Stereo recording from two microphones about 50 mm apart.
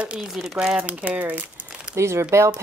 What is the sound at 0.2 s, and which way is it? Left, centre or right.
Speech, centre.